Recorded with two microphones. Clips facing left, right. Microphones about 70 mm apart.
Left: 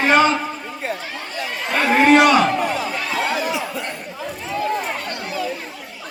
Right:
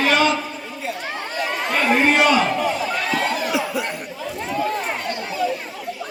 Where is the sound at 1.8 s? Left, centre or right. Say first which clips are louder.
Left 4 dB; left.